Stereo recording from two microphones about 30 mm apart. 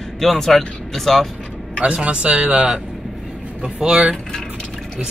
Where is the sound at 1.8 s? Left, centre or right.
Right.